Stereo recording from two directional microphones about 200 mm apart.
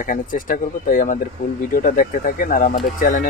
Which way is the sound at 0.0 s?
45° left (ahead or behind).